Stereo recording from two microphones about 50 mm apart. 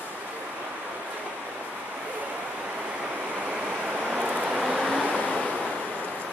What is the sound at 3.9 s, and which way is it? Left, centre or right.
Vehicle, right.